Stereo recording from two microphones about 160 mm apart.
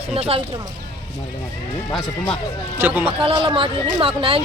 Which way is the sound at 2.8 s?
10° right (ahead or behind).